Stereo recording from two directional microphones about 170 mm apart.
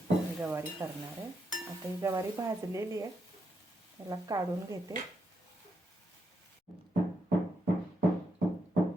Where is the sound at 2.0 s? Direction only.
20° right (ahead or behind).